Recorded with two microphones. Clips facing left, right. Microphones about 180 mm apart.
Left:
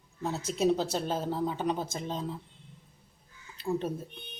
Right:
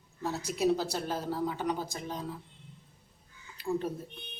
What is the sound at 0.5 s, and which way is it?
A woman's voice, 20° left (ahead or behind).